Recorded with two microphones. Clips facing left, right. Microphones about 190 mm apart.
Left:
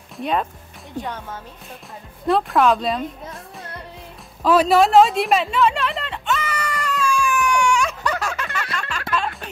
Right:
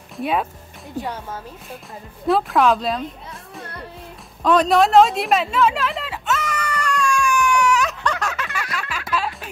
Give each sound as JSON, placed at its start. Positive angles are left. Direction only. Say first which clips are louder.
{"t": 0.2, "sound": "speech", "louder": "right 1 dB", "side_deg": -5}
{"t": 4.4, "sound": "music", "louder": "left 1 dB", "side_deg": 5}